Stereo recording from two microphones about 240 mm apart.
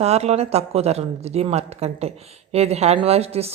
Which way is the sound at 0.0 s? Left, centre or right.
Right.